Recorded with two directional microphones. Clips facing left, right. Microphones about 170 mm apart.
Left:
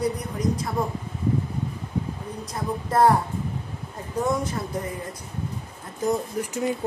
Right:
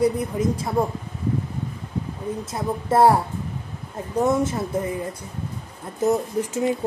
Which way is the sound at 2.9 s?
30° right (ahead or behind).